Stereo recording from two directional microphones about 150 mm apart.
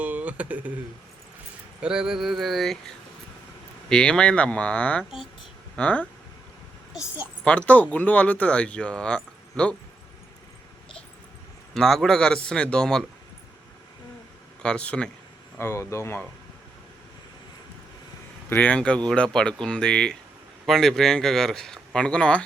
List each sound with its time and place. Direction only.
0.0 s a sound: 10° right (ahead or behind)
1.8 s speech: 5° right (ahead or behind)
7.4 s speech: 10° left (ahead or behind)
11.7 s speech: 5° left (ahead or behind)
14.6 s speech: 5° left (ahead or behind)
15.5 s speech: 15° left (ahead or behind)
18.4 s speech: 10° left (ahead or behind)